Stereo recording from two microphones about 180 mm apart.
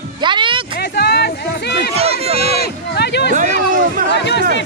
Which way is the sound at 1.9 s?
35° right (ahead or behind).